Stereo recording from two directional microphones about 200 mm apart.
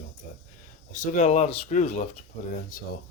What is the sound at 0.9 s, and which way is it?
Speech, 40° left (ahead or behind).